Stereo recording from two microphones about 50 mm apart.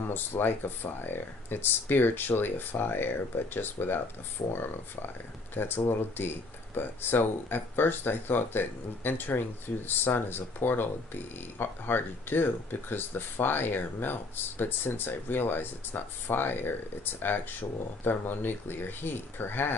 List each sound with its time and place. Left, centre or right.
0.1 s speech: left